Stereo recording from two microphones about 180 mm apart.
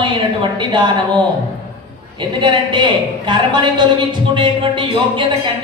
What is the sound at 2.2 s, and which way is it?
A man's voice, 25° right (ahead or behind).